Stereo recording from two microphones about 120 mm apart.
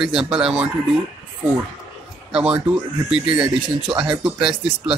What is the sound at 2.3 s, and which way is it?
Speech, 10° right (ahead or behind).